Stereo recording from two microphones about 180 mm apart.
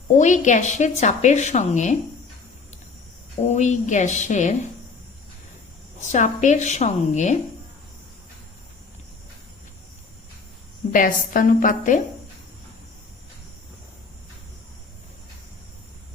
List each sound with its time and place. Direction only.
0.2 s a woman's voice: 45° left (ahead or behind)
3.4 s a woman's voice: 40° left (ahead or behind)
6.0 s a woman's voice: 40° left (ahead or behind)
10.9 s a woman's voice: 50° left (ahead or behind)